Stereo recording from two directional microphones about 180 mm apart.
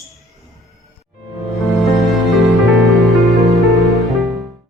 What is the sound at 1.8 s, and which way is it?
Music, centre (ahead or behind).